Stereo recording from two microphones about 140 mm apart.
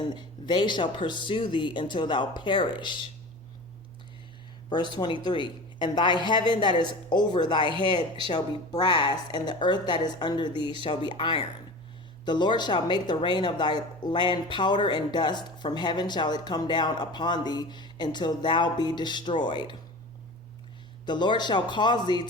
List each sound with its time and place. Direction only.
0.0 s speech: 35° left (ahead or behind)
4.9 s speech: 30° left (ahead or behind)
21.1 s speech: 30° left (ahead or behind)